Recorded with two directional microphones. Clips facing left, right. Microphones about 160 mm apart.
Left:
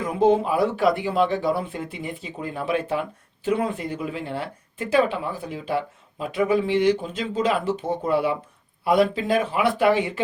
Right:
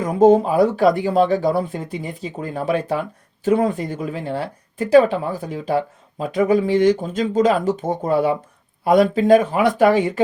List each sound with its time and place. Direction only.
0.0 s speech: 45° right (ahead or behind)